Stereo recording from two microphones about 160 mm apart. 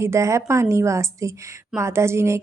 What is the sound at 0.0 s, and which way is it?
A woman's voice, 20° right (ahead or behind).